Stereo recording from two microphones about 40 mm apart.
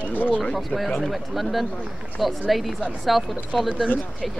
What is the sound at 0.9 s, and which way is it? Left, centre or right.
Speech, centre.